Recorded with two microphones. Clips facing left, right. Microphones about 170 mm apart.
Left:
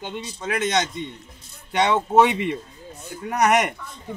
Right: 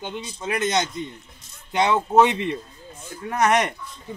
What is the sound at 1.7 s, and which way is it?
Speech, centre (ahead or behind).